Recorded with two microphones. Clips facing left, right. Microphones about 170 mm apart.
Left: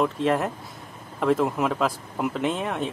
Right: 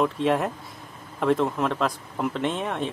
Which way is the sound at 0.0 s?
Centre (ahead or behind).